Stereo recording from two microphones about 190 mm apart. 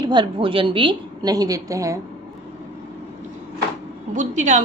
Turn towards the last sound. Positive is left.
turn(degrees=-40)  # may be behind; listen again after turning